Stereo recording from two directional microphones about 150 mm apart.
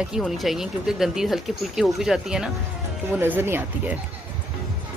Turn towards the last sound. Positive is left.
turn(degrees=-15)  # may be behind; listen again after turning